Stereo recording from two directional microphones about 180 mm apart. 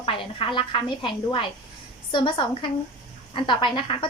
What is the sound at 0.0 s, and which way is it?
A woman's voice, 30° left (ahead or behind).